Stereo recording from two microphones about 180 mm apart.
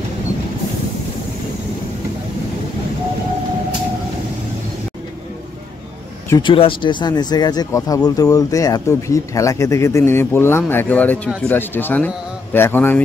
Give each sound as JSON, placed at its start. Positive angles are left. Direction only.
{"t": 6.3, "sound": "speech", "side_deg": 30}